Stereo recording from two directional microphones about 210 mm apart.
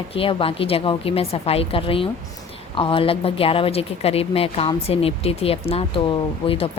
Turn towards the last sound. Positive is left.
turn(degrees=25)  # may be behind; listen again after turning